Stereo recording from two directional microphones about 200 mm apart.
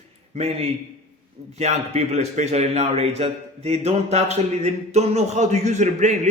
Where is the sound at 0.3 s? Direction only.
30° right (ahead or behind).